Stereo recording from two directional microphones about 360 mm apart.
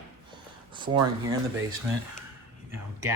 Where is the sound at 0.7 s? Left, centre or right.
Centre.